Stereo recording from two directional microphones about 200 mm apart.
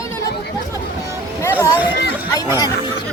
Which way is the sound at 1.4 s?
10° left (ahead or behind).